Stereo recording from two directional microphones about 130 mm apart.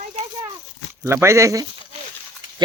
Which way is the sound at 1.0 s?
20° right (ahead or behind).